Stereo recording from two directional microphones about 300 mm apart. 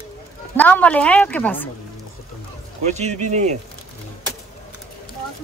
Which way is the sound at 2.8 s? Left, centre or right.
Right.